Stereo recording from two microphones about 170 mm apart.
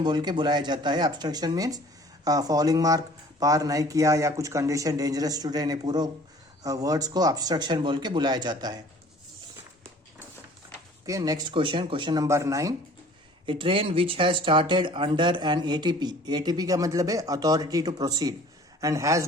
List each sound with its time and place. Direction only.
0.0 s speech: 25° right (ahead or behind)
11.0 s speech: 20° right (ahead or behind)
13.4 s a man's voice: 30° right (ahead or behind)